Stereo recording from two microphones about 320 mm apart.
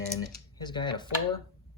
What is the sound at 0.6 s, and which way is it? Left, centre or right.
Speech, centre.